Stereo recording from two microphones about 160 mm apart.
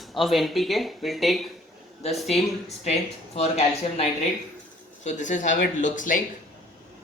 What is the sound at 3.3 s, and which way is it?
Speech, 40° left (ahead or behind).